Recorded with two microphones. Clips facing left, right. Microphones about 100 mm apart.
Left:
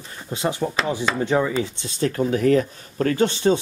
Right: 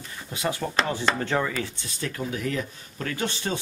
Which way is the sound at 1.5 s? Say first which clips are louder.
Left 7 dB; 20° left (ahead or behind).